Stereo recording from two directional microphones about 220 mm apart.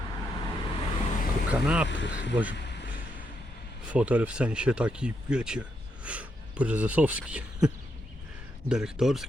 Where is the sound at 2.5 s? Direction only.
50° left (ahead or behind).